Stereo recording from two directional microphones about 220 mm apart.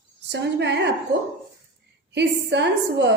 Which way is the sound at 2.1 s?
50° right (ahead or behind).